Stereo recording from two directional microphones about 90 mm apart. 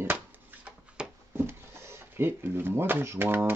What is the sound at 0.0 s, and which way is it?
Shuffling cards, 20° right (ahead or behind).